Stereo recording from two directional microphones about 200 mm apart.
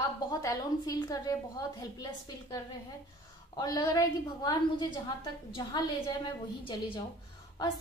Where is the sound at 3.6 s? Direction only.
20° left (ahead or behind).